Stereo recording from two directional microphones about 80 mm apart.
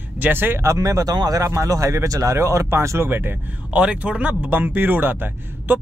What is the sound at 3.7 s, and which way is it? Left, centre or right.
Speech, centre.